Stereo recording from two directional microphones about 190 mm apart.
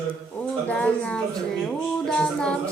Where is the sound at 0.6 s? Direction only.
5° left (ahead or behind).